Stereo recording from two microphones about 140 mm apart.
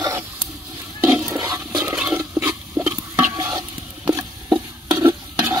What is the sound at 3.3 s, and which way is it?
Stir, 25° right (ahead or behind).